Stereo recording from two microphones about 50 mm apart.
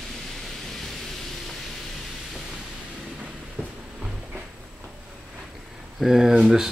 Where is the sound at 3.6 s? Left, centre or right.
Centre.